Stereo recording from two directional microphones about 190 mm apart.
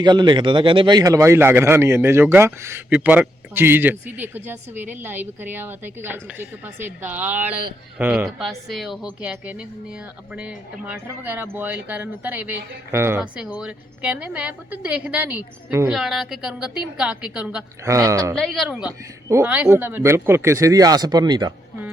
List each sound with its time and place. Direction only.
0.0 s a woman's voice: 20° right (ahead or behind); by 17.6 s 5° right (ahead or behind)
17.8 s speech: 15° right (ahead or behind)
18.3 s a woman's voice: centre (ahead or behind); by 21.5 s 20° right (ahead or behind)